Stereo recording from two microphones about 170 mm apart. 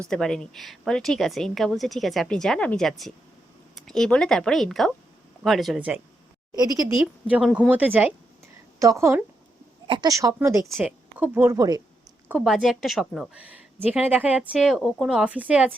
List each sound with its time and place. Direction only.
0.1 s a woman's voice: 5° left (ahead or behind)
6.6 s a woman's voice: 20° right (ahead or behind)
7.0 s a woman's voice: 5° right (ahead or behind)
9.8 s a woman's voice: 25° right (ahead or behind)
12.3 s a woman's voice: centre (ahead or behind)